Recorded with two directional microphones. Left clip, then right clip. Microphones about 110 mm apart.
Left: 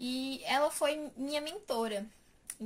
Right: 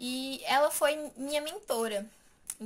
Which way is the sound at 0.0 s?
15° left (ahead or behind).